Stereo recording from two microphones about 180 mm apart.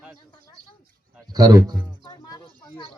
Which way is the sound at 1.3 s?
20° right (ahead or behind).